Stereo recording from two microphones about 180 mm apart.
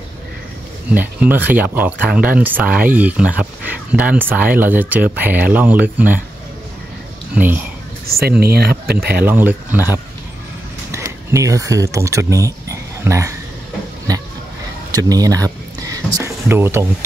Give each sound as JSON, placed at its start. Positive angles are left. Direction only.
{"t": 0.9, "sound": "speech", "side_deg": -10}
{"t": 7.3, "sound": "speech", "side_deg": -10}
{"t": 8.2, "sound": "speech", "side_deg": -60}
{"t": 9.2, "sound": "speech", "side_deg": -10}
{"t": 10.9, "sound": "speech", "side_deg": -15}
{"t": 14.9, "sound": "a sound", "side_deg": -20}
{"t": 16.4, "sound": "speech", "side_deg": -15}